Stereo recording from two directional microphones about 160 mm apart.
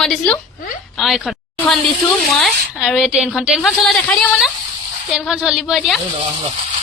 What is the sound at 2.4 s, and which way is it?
A woman's voice, centre (ahead or behind).